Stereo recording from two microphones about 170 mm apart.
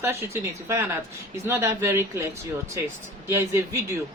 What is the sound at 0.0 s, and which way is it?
Speech, 15° right (ahead or behind).